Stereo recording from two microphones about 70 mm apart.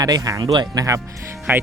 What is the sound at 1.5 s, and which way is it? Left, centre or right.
Speech, right.